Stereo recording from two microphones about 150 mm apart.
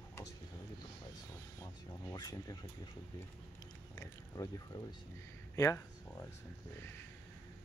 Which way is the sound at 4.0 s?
25° left (ahead or behind).